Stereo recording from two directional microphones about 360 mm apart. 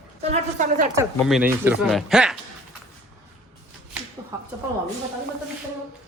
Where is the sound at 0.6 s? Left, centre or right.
Right.